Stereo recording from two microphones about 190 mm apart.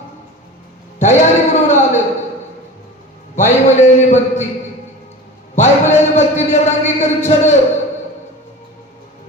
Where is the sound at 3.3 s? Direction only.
40° left (ahead or behind).